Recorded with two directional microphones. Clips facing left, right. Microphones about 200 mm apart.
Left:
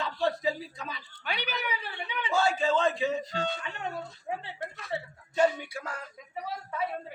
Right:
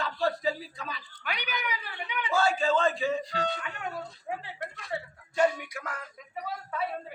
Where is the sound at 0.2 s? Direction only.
20° left (ahead or behind).